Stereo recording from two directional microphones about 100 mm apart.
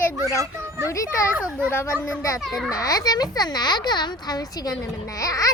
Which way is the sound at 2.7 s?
40° left (ahead or behind).